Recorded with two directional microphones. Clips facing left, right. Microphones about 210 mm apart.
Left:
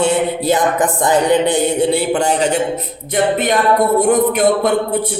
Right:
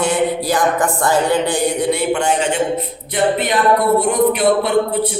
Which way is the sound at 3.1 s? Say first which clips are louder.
Left 2 dB; 45° left (ahead or behind).